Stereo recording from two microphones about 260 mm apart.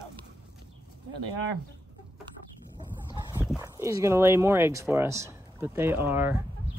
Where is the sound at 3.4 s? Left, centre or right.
Centre.